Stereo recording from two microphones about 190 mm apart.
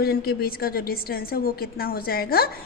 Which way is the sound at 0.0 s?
55° left (ahead or behind).